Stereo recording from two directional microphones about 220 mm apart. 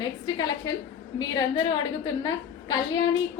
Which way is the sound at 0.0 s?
20° left (ahead or behind).